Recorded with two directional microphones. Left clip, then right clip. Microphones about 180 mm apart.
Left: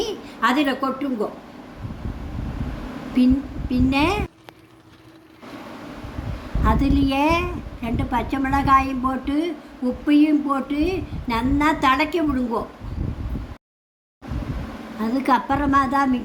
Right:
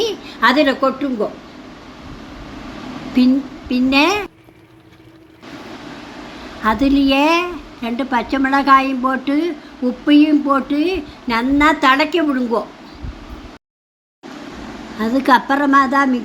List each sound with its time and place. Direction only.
0.0 s a sound: 20° right (ahead or behind)
3.2 s a woman's voice: 25° right (ahead or behind)
6.6 s a woman's voice: 20° right (ahead or behind)
15.0 s a woman's voice: 20° right (ahead or behind)